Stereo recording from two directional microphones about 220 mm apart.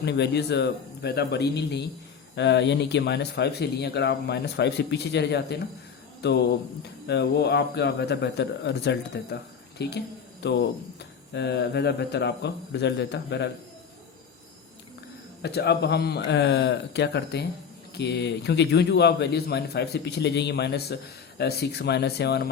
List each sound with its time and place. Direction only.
0.0 s a man's voice: 50° left (ahead or behind)
15.4 s a man's voice: 50° left (ahead or behind)